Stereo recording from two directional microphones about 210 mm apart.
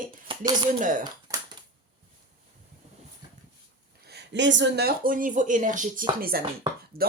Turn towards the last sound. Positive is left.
turn(degrees=-45)  # may be behind; listen again after turning